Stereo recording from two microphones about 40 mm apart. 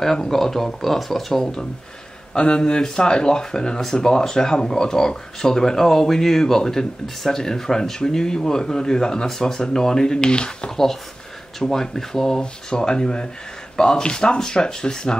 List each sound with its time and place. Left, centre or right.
0.0 s speech: centre
2.3 s speech: left
11.6 s speech: centre